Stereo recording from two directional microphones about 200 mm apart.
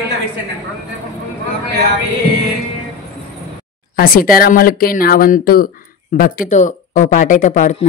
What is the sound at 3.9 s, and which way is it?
Speech, 45° left (ahead or behind).